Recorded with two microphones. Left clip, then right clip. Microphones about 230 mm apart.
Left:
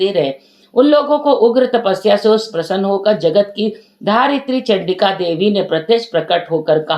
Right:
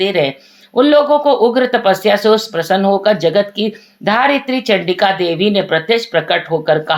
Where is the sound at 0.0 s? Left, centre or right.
Right.